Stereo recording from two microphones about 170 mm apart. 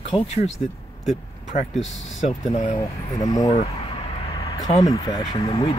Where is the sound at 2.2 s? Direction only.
45° left (ahead or behind).